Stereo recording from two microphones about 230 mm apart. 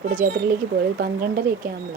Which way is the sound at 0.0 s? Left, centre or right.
Right.